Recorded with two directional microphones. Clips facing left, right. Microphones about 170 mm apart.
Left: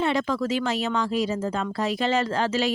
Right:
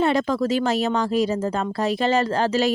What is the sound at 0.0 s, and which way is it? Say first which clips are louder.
Speech: right 4 dB; 40° right (ahead or behind).